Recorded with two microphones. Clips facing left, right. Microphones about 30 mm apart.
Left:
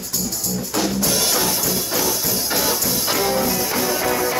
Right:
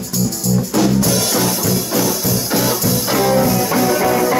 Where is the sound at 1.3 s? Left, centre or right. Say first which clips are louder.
Right 4 dB; centre.